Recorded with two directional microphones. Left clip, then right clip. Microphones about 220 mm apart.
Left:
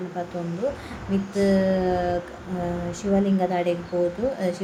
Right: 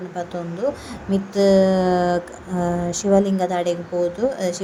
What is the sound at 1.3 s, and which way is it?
A woman's voice, 25° right (ahead or behind).